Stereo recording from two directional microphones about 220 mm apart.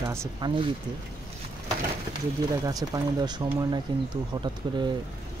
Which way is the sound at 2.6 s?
15° right (ahead or behind).